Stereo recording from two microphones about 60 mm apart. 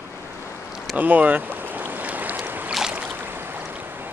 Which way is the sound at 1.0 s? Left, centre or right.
Right.